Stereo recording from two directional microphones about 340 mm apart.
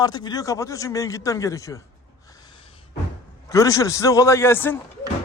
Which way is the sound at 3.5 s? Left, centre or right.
Centre.